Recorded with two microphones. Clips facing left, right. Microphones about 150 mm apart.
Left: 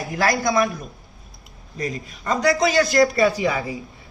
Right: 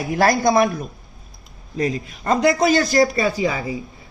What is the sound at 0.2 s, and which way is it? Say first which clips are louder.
Speech: right 4 dB; 45° right (ahead or behind).